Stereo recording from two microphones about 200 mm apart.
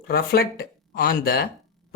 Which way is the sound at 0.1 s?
50° left (ahead or behind).